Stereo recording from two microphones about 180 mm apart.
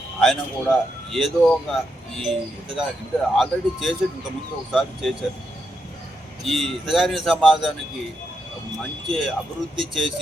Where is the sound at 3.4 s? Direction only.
Centre (ahead or behind).